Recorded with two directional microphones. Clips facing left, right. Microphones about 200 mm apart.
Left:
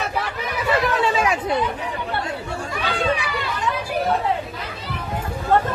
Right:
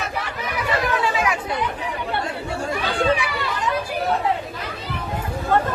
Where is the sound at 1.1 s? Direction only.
25° left (ahead or behind).